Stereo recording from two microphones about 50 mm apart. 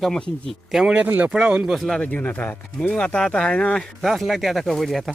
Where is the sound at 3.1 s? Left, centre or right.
Centre.